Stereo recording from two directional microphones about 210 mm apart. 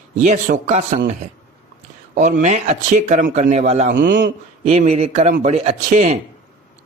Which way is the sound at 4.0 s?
55° right (ahead or behind).